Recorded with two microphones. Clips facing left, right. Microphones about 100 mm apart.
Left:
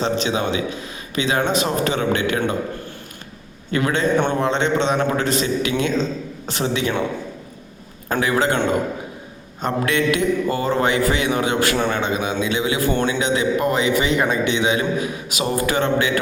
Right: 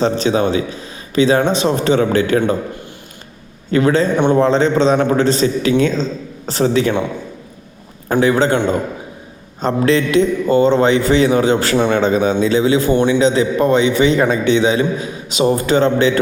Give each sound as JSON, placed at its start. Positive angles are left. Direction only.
{"t": 0.0, "sound": "a man's voice", "side_deg": -35}
{"t": 3.7, "sound": "a man's voice", "side_deg": -30}
{"t": 8.2, "sound": "a man's voice", "side_deg": -30}
{"t": 9.6, "sound": "a man's voice", "side_deg": -30}